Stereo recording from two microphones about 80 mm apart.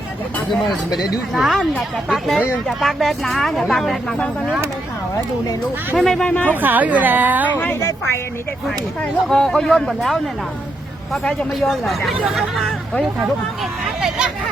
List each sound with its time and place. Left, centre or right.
0.5 s speech: centre
6.0 s speech: centre
6.2 s speech: centre
6.6 s a woman's voice: right
7.8 s a woman's voice: left
9.2 s speech: centre
13.8 s hubbub: centre